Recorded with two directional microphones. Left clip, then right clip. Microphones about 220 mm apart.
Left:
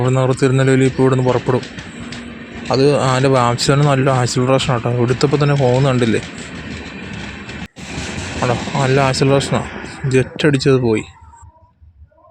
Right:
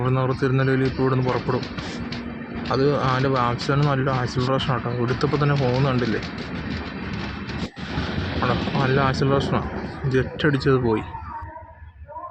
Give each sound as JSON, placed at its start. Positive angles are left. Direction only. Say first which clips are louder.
{"t": 0.0, "sound": "a man's voice", "louder": "left 7 dB", "side_deg": 35}
{"t": 2.6, "sound": "a man's voice", "louder": "left 7 dB", "side_deg": 35}
{"t": 8.4, "sound": "a man's voice", "louder": "left 6 dB", "side_deg": 35}